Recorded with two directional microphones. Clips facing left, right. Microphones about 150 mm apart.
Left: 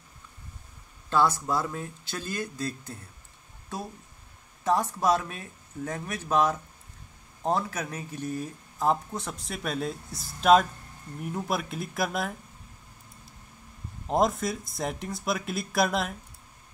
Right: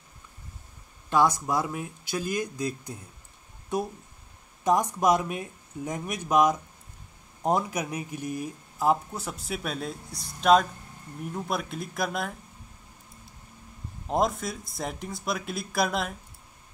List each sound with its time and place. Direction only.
1.1 s speech: 15° right (ahead or behind); by 12.4 s centre (ahead or behind)
14.0 s speech: centre (ahead or behind)